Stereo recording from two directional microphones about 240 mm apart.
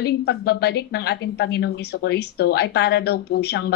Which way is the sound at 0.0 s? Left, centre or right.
Left.